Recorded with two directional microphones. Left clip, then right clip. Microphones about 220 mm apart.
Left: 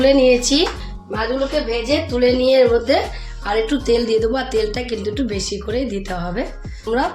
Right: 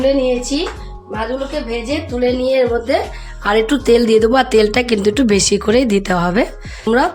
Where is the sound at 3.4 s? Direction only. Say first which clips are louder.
Right 5 dB; 40° right (ahead or behind).